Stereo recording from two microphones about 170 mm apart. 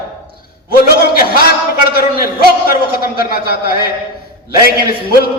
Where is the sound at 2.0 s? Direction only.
60° left (ahead or behind).